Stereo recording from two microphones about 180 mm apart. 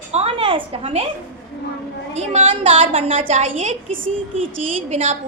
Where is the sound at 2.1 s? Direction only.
35° right (ahead or behind).